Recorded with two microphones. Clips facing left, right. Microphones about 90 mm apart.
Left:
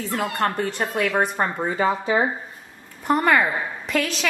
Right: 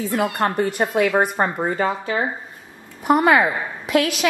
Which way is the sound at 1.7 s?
5° left (ahead or behind).